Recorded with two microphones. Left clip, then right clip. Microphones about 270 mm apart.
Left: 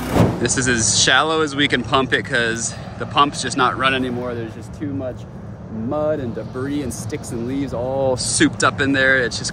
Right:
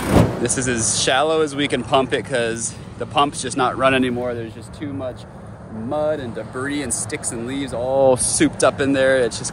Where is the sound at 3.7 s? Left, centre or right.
Centre.